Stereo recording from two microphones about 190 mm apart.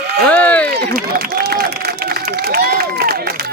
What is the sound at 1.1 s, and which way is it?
Speech, 55° right (ahead or behind).